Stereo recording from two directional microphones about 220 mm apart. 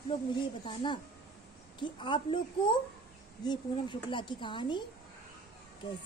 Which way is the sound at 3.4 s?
20° left (ahead or behind).